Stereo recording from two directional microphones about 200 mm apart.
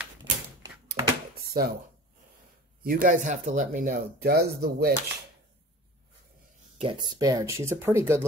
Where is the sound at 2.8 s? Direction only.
45° right (ahead or behind).